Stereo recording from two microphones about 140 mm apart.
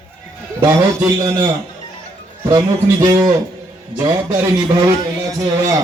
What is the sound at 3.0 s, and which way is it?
A man's voice, 30° right (ahead or behind).